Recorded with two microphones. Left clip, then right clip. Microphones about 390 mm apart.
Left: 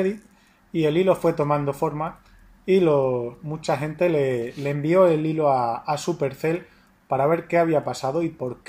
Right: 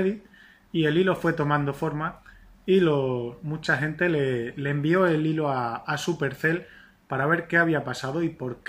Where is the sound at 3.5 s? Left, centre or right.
Centre.